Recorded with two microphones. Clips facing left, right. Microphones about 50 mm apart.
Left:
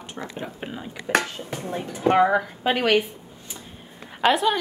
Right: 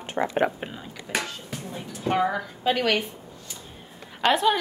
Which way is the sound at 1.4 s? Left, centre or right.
Left.